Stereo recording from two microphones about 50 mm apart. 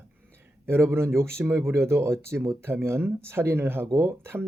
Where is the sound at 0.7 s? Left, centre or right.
Right.